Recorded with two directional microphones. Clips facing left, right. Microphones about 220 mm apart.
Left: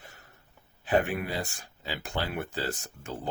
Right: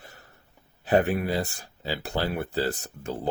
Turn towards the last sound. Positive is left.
turn(degrees=-35)  # may be behind; listen again after turning